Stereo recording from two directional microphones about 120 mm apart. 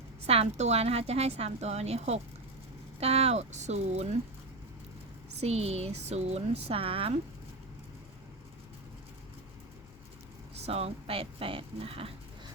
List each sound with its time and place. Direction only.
0.3 s a woman's voice: 60° right (ahead or behind)
5.4 s a woman's voice: 60° right (ahead or behind)
10.7 s speech: 55° right (ahead or behind)